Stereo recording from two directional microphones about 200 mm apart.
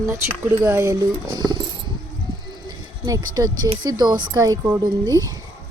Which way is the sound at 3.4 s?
20° right (ahead or behind).